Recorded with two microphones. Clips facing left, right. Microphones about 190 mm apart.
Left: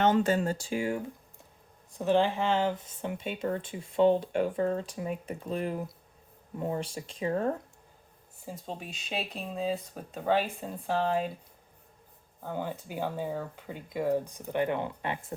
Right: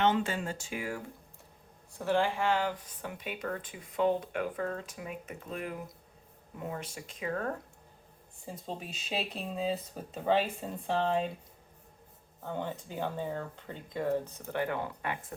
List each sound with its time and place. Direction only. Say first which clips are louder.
0.0 s speech: left 4 dB; 40° left (ahead or behind); by 7.5 s 25° left (ahead or behind)
8.4 s speech: left 1 dB; centre (ahead or behind)
12.4 s speech: left 2 dB; 5° left (ahead or behind); by 15.2 s 25° left (ahead or behind)